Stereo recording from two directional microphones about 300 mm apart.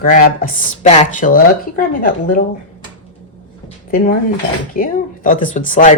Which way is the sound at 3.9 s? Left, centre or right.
Left.